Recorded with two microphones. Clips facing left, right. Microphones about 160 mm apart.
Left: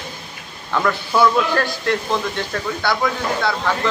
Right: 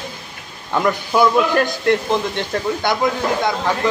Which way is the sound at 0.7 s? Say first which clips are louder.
Right 2 dB; 15° right (ahead or behind).